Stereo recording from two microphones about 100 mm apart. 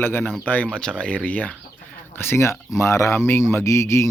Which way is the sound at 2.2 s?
25° left (ahead or behind).